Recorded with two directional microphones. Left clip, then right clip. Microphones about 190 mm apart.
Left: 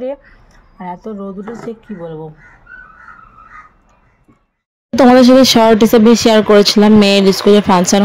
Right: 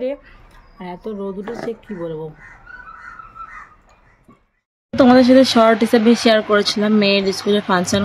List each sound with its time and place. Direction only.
0.0 s speech: 5° right (ahead or behind)
4.9 s speech: 35° left (ahead or behind)